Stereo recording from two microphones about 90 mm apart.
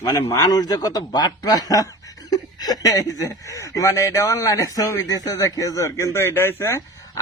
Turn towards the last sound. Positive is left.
turn(degrees=25)  # may be behind; listen again after turning